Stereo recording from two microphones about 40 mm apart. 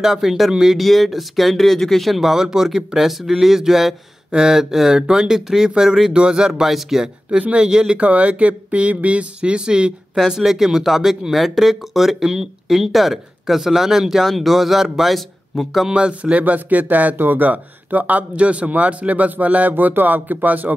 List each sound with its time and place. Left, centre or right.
0.0 s speech: centre
0.7 s speech: centre
2.1 s speech: centre
6.1 s speech: right
6.7 s speech: centre
7.5 s speech: right
8.0 s speech: right
10.1 s speech: centre
15.9 s speech: right
16.5 s speech: right
19.7 s speech: right